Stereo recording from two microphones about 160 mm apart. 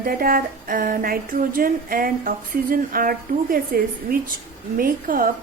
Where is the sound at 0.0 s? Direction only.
65° right (ahead or behind).